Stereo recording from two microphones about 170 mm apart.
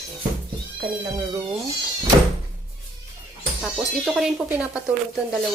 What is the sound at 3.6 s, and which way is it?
Speech, 5° right (ahead or behind).